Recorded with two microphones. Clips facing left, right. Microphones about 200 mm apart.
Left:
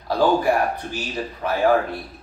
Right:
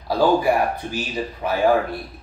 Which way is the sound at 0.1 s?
10° right (ahead or behind).